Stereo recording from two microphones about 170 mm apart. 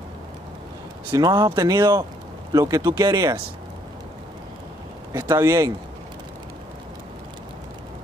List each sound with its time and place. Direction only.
1.1 s speech: 20° right (ahead or behind)
5.1 s speech: 15° right (ahead or behind)